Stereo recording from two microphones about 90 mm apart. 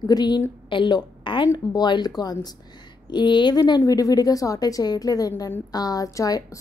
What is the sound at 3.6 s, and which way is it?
A woman's voice, 40° left (ahead or behind).